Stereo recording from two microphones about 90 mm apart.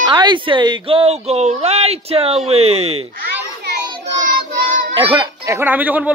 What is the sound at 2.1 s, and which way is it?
Speech, 90° right.